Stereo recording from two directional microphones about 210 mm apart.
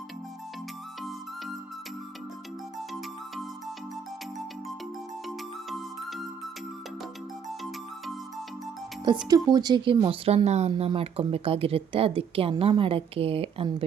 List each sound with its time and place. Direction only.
2.7 s music: centre (ahead or behind)
5.7 s music: centre (ahead or behind)
9.3 s speech: 20° right (ahead or behind)